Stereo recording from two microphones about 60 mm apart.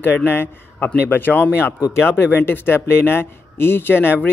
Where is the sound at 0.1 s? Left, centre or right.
Left.